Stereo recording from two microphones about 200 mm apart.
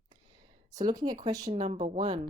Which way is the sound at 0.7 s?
20° right (ahead or behind).